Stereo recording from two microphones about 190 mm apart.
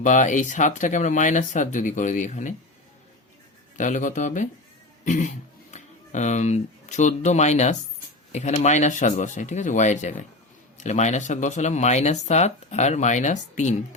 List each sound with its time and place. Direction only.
0.0 s speech: 40° left (ahead or behind)
3.8 s speech: 40° left (ahead or behind)